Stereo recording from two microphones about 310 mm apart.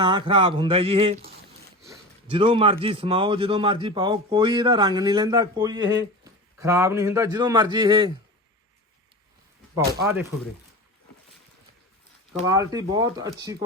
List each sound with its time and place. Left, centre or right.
0.0 s a man's voice: centre
2.2 s a man's voice: centre
9.7 s a man's voice: centre
12.3 s a man's voice: centre